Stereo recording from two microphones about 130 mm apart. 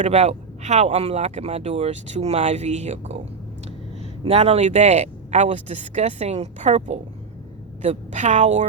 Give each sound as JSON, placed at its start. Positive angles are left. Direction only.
{"t": 0.0, "sound": "speech", "side_deg": -60}
{"t": 4.2, "sound": "a woman's voice", "side_deg": -50}